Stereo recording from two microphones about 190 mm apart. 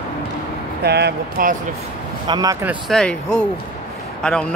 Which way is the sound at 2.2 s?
20° right (ahead or behind).